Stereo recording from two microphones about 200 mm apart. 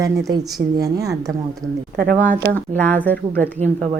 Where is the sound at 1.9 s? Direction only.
50° right (ahead or behind).